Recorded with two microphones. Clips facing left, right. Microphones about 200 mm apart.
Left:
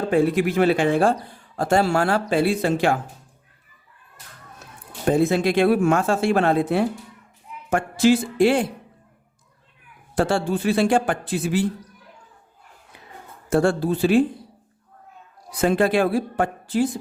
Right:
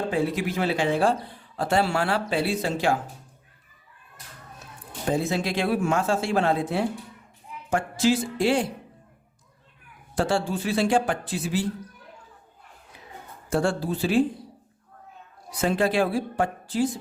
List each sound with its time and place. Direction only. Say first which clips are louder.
0.1 s speech: left 6 dB; 55° left (ahead or behind)
5.0 s speech: left 7 dB; 55° left (ahead or behind)
10.2 s speech: left 4 dB; 55° left (ahead or behind)
13.5 s speech: left 5 dB; 55° left (ahead or behind)
15.6 s speech: left 4 dB; 55° left (ahead or behind)